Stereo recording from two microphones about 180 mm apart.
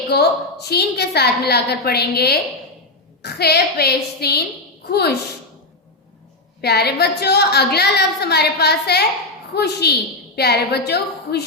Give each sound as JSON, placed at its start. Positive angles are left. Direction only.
{"t": 0.1, "sound": "a woman's voice", "side_deg": 65}
{"t": 6.6, "sound": "a woman's voice", "side_deg": 65}